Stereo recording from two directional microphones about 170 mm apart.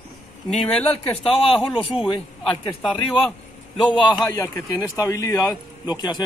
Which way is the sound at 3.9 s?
25° left (ahead or behind).